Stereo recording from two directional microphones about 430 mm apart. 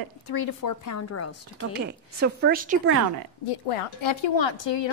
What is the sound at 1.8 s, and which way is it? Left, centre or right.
A woman's voice, right.